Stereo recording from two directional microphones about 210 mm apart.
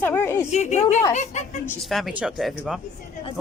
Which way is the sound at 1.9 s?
Centre (ahead or behind).